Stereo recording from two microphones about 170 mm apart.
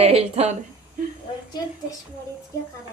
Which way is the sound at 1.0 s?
50° right (ahead or behind).